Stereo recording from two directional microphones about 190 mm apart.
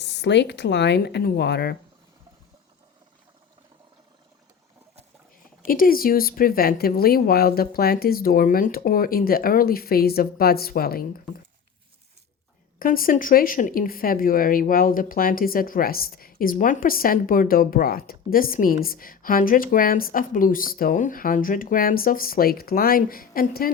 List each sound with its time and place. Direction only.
0.0 s speech: 65° left (ahead or behind)
5.6 s speech: 50° left (ahead or behind)
12.8 s speech: 50° left (ahead or behind)